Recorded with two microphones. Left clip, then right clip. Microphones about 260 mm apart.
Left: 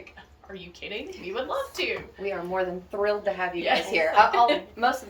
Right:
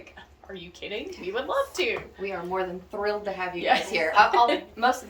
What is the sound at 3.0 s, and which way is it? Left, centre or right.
A woman's voice, centre.